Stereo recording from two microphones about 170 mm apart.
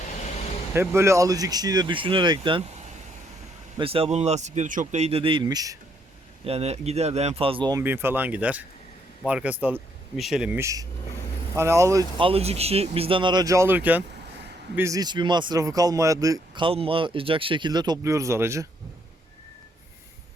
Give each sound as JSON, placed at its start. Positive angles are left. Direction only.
{"t": 0.7, "sound": "speech", "side_deg": -15}
{"t": 3.8, "sound": "speech", "side_deg": -35}
{"t": 6.4, "sound": "speech", "side_deg": -35}
{"t": 7.8, "sound": "speech", "side_deg": -15}
{"t": 10.6, "sound": "speech", "side_deg": -20}
{"t": 12.2, "sound": "speech", "side_deg": -35}